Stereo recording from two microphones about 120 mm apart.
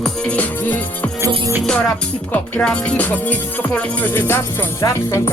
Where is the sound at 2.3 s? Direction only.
10° left (ahead or behind).